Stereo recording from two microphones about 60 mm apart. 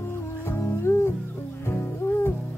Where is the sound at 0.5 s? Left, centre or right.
Left.